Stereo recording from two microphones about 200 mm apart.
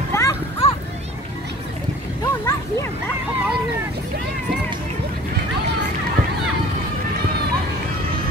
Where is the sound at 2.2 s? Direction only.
20° left (ahead or behind).